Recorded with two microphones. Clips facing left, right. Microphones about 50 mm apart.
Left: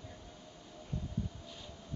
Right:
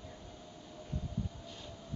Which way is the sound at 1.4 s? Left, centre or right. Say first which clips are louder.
Right 2 dB; centre.